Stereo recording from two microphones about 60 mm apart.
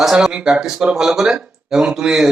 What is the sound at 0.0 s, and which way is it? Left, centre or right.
Speech, centre.